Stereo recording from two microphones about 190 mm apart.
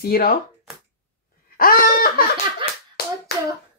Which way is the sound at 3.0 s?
55° left (ahead or behind).